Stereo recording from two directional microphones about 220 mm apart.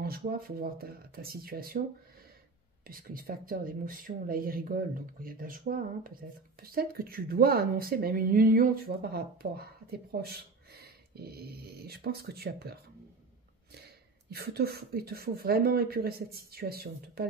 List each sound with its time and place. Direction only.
0.0 s speech: 45° right (ahead or behind)
2.8 s speech: 40° right (ahead or behind)